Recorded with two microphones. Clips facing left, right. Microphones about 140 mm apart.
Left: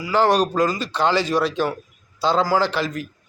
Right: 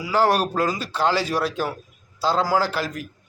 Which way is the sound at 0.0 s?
5° right (ahead or behind).